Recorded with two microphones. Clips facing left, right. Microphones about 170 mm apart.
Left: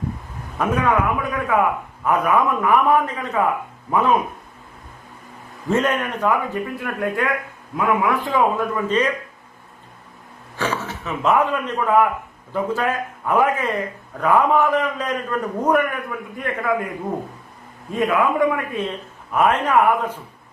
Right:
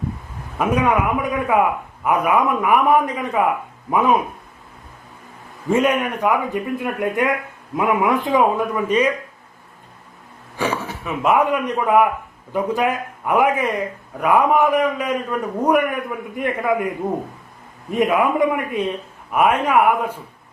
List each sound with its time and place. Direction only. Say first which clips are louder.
0.6 s a man's voice: right 1 dB; 15° right (ahead or behind)
5.7 s a man's voice: right 3 dB; 10° right (ahead or behind)
10.6 s a man's voice: right 2 dB; 15° right (ahead or behind)
17.9 s a man's voice: right 2 dB; 20° right (ahead or behind)